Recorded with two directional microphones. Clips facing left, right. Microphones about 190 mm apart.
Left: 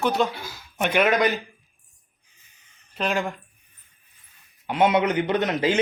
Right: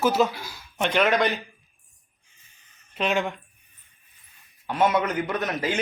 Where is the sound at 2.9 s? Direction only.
Centre (ahead or behind).